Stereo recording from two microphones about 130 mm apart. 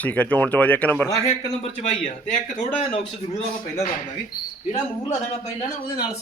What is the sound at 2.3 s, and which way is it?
Speech, 70° left (ahead or behind).